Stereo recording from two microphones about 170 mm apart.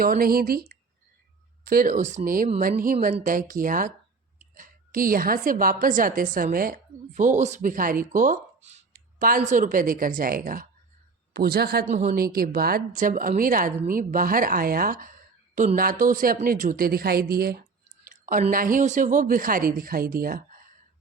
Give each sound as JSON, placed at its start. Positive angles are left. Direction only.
{"t": 0.0, "sound": "a woman's voice", "side_deg": -60}
{"t": 11.9, "sound": "speech", "side_deg": -45}
{"t": 12.1, "sound": "a woman's voice", "side_deg": -60}
{"t": 18.0, "sound": "a sound", "side_deg": -50}
{"t": 18.5, "sound": "a woman's voice", "side_deg": -55}